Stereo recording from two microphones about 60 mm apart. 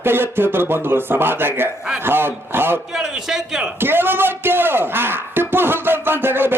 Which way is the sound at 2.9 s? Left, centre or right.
Centre.